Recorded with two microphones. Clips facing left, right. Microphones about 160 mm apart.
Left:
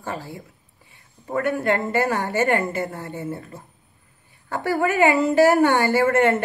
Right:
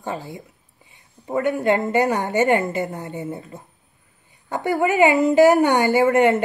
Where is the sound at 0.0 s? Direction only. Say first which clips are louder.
Right 2 dB; 20° right (ahead or behind).